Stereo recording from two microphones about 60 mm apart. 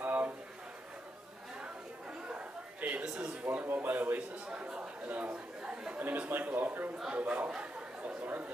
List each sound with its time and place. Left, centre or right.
0.0 s a sound: right
1.6 s chatter: centre
2.8 s a sound: right
3.4 s speech: right
4.6 s a man's voice: right
7.1 s chatter: right